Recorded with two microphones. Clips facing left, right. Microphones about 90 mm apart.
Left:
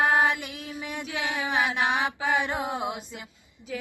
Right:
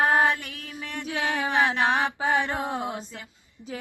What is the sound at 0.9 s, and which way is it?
Mantra, 15° left (ahead or behind).